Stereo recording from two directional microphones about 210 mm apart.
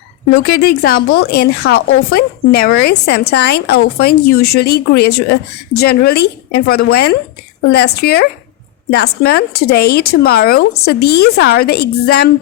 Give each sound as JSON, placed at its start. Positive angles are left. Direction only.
{"t": 0.4, "sound": "speech", "side_deg": 45}